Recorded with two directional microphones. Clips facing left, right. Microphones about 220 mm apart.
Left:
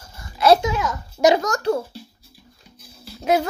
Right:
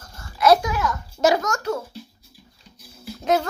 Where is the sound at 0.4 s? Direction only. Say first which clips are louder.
Left 1 dB; 25° left (ahead or behind).